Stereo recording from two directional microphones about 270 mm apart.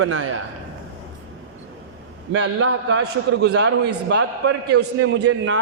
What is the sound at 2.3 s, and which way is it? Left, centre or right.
A man's voice, right.